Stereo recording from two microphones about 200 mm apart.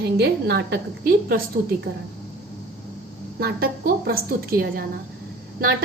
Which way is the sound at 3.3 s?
50° right (ahead or behind).